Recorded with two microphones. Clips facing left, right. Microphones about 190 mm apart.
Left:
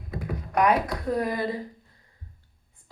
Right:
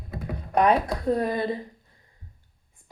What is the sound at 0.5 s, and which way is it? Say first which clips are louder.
Speech: right 2 dB; 30° right (ahead or behind).